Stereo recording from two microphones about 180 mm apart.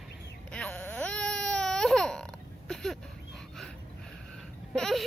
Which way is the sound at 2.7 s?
Centre (ahead or behind).